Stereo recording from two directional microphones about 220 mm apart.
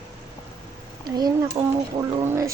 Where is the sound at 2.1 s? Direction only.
15° right (ahead or behind).